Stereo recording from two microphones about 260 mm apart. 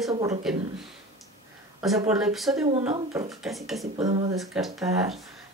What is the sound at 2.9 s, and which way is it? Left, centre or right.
Speech, centre.